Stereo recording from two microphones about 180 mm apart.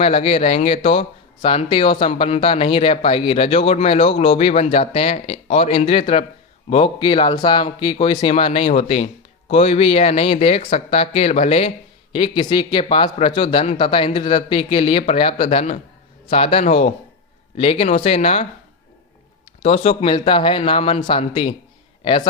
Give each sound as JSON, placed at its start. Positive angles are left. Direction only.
{"t": 0.0, "sound": "speech", "side_deg": 30}
{"t": 19.6, "sound": "speech", "side_deg": 35}